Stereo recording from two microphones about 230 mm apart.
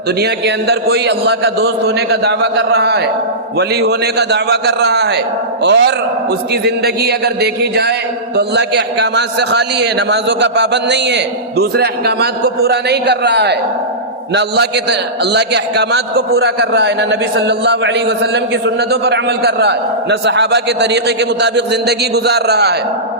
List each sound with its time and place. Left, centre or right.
0.2 s a man's voice: right